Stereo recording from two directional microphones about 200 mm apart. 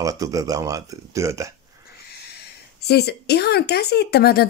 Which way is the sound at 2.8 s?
55° left (ahead or behind).